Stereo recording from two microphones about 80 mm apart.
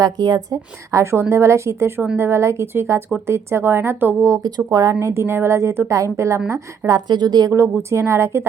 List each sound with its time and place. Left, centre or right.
0.0 s a woman's voice: right
4.4 s a woman's voice: right
7.1 s a woman's voice: right
7.5 s a woman's voice: right